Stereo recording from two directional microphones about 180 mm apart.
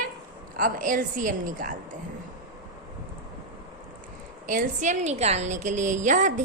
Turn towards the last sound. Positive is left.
turn(degrees=-45)  # may be behind; listen again after turning